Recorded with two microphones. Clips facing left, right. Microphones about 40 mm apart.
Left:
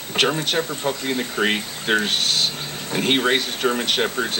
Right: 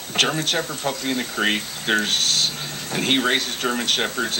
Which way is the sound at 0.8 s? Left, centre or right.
Centre.